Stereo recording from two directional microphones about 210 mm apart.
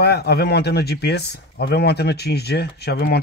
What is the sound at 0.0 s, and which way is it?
Speech, 50° left (ahead or behind).